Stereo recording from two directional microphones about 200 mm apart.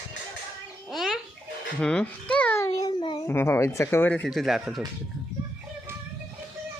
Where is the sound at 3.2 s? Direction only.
10° left (ahead or behind).